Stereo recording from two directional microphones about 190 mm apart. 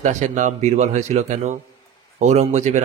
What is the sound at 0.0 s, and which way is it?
Speech, 40° right (ahead or behind).